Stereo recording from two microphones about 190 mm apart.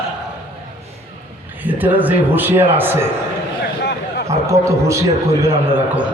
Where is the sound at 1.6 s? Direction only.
10° right (ahead or behind).